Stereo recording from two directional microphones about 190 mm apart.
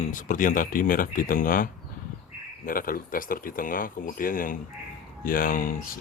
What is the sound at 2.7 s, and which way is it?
A man's voice, 50° left (ahead or behind).